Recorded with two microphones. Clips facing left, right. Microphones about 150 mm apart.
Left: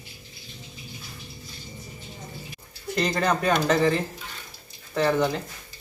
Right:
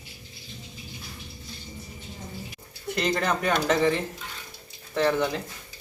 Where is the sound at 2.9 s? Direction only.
Centre (ahead or behind).